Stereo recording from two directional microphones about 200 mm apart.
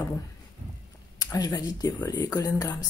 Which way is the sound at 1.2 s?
20° left (ahead or behind).